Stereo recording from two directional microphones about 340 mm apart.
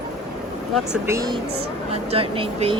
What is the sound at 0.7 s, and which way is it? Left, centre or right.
A woman's voice, centre.